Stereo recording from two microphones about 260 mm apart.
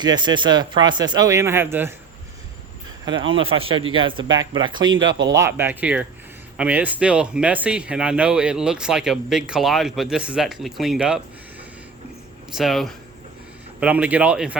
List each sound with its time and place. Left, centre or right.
0.0 s a man's voice: centre
3.1 s a man's voice: centre
12.5 s speech: centre